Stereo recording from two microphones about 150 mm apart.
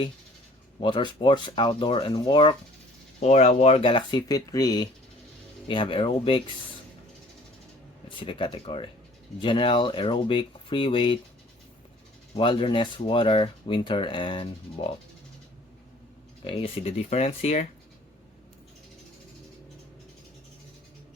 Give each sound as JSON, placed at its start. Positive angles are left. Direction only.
{"t": 0.8, "sound": "speech", "side_deg": 30}
{"t": 3.2, "sound": "speech", "side_deg": 45}
{"t": 8.1, "sound": "speech", "side_deg": 35}
{"t": 12.3, "sound": "speech", "side_deg": 35}
{"t": 16.4, "sound": "speech", "side_deg": 35}